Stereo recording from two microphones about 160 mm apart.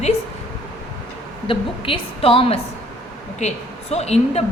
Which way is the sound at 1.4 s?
35° left (ahead or behind).